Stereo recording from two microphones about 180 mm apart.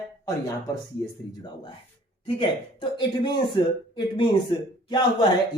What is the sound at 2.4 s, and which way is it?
Speech, 25° left (ahead or behind).